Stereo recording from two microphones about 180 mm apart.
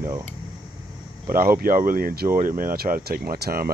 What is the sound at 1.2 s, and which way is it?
Speech, 50° right (ahead or behind).